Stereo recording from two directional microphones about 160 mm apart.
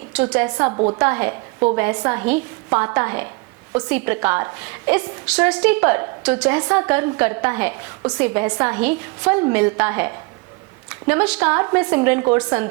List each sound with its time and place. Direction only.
0.1 s a woman's voice: 10° right (ahead or behind)
0.4 s a woman's voice: 20° right (ahead or behind)
0.9 s a woman's voice: 10° right (ahead or behind)